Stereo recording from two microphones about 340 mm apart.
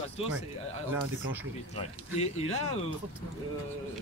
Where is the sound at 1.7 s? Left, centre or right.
Centre.